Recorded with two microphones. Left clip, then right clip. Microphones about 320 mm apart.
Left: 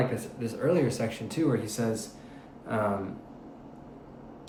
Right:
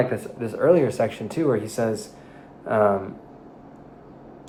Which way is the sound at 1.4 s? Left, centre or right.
Right.